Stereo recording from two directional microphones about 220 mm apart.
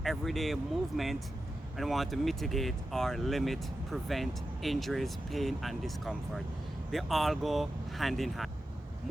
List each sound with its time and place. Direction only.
0.0 s speech: centre (ahead or behind)